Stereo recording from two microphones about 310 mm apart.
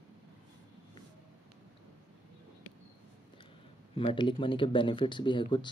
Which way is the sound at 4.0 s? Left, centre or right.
Centre.